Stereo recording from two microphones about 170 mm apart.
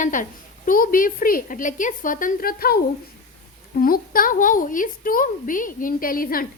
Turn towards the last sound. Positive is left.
turn(degrees=55)  # may be behind; listen again after turning